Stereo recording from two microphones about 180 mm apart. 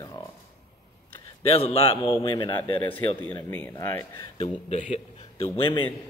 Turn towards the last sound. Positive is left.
turn(degrees=30)  # may be behind; listen again after turning